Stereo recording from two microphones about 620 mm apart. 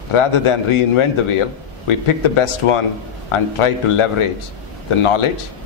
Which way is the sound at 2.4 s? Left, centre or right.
Left.